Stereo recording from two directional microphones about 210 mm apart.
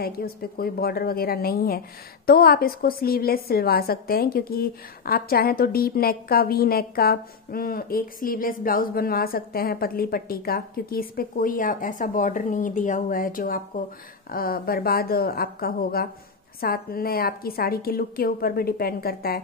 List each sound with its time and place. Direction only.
0.0 s a woman's voice: 45° left (ahead or behind)